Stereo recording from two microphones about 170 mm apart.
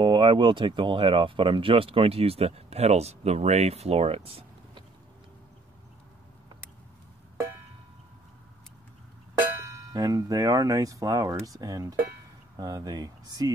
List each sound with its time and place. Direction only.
0.0 s speech: 30° right (ahead or behind)
9.6 s speech: 20° right (ahead or behind)